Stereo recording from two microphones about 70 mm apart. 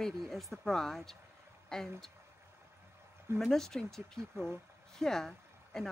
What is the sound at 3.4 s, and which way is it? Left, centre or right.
Speech, centre.